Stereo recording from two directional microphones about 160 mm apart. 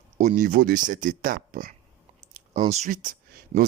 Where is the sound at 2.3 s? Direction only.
45° right (ahead or behind); by 3.7 s 60° right (ahead or behind).